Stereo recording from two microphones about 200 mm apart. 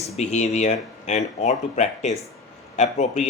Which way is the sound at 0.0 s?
35° left (ahead or behind).